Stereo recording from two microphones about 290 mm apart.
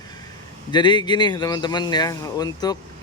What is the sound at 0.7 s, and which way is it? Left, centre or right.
Speech, centre.